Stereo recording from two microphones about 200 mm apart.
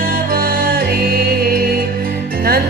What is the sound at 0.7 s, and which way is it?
Music, 50° right (ahead or behind).